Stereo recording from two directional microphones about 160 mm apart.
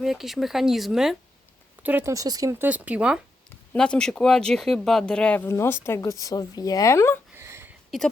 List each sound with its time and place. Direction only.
0.0 s speech: centre (ahead or behind)
3.7 s speech: 5° left (ahead or behind)
7.3 s a sound: 15° right (ahead or behind)
7.9 s speech: centre (ahead or behind)